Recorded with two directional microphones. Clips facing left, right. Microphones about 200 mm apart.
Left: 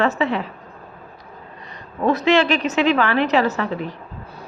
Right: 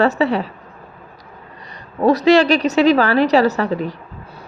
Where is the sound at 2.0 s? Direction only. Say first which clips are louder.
Right 5 dB; 40° right (ahead or behind).